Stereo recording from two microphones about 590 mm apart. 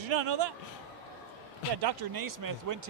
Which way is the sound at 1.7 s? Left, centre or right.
Right.